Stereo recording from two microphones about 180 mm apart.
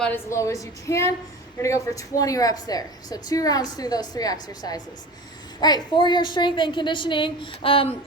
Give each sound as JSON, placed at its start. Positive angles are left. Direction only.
{"t": 0.0, "sound": "a woman's voice", "side_deg": 10}